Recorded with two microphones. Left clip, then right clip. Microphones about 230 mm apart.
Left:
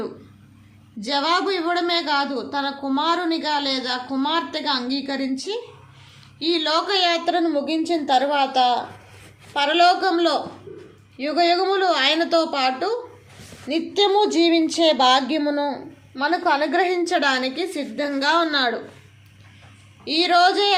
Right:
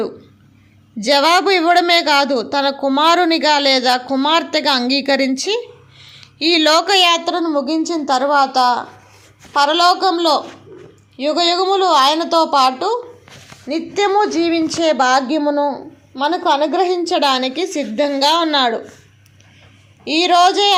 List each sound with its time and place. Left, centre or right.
0.9 s a woman's voice: right
9.6 s a woman's voice: right
13.7 s speech: centre
14.3 s a sound: centre
14.8 s a woman's voice: right
15.1 s speech: centre
16.1 s a woman's voice: right
16.8 s a woman's voice: centre
18.1 s a woman's voice: centre
20.1 s a woman's voice: right